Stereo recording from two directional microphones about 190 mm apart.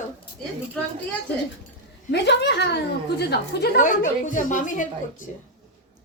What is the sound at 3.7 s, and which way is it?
A woman's voice, 45° left (ahead or behind).